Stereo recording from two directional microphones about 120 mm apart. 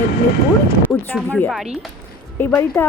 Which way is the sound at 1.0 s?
15° left (ahead or behind).